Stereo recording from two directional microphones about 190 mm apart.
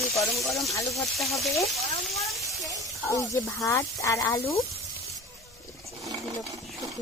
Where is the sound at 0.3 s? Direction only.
Centre (ahead or behind).